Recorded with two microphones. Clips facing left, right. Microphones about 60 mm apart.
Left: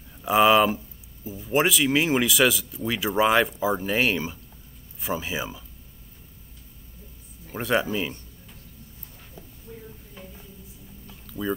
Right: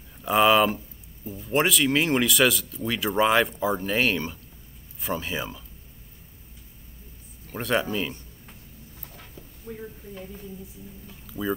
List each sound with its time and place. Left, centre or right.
0.2 s speech: centre
7.4 s speech: centre
9.7 s speech: right
11.2 s a sound: centre